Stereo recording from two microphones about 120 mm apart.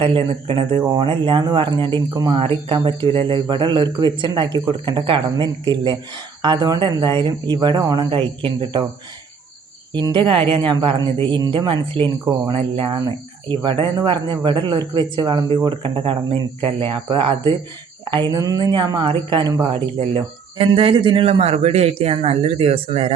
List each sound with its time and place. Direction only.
0.0 s speech: 50° right (ahead or behind)
9.9 s speech: 40° right (ahead or behind)
19.7 s speech: 45° right (ahead or behind)